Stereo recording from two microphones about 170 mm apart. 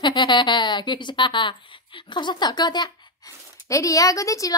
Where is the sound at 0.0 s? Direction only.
25° left (ahead or behind).